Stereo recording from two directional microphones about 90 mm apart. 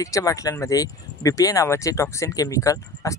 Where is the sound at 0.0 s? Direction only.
40° left (ahead or behind).